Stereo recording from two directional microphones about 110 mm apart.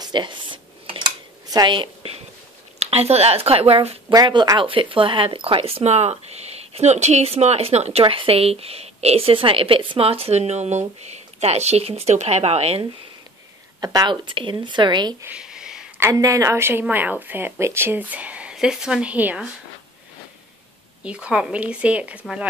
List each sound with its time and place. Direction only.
0.0 s dishes: 45° right (ahead or behind)
1.5 s a woman's voice: 45° right (ahead or behind)
2.8 s speech: 70° right (ahead or behind)
4.1 s speech: 40° right (ahead or behind); by 8.0 s 75° right (ahead or behind)
8.0 s a woman's voice: 55° right (ahead or behind); by 12.8 s 70° right (ahead or behind)
13.7 s speech: 35° right (ahead or behind)
15.2 s a sound: 5° right (ahead or behind)
16.0 s a woman's voice: 30° right (ahead or behind); by 19.5 s 15° right (ahead or behind)
21.0 s speech: 10° right (ahead or behind)